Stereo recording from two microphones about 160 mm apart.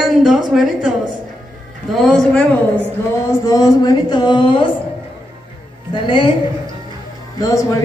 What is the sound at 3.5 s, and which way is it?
Speech, 25° left (ahead or behind).